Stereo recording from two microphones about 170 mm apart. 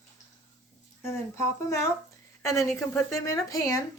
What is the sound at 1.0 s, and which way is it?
A woman's voice, 15° left (ahead or behind).